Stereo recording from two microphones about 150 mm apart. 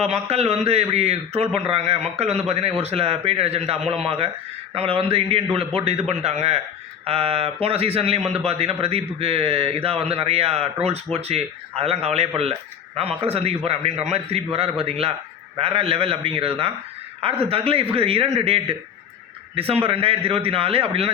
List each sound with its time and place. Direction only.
0.0 s a man's voice: 45° right (ahead or behind)